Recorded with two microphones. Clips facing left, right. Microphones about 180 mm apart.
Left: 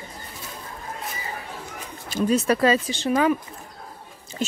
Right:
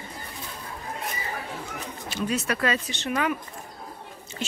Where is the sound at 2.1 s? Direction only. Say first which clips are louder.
Left 7 dB; 35° left (ahead or behind).